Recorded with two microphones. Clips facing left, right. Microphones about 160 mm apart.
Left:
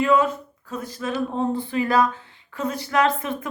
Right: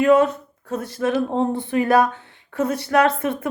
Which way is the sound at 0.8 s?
70° right (ahead or behind).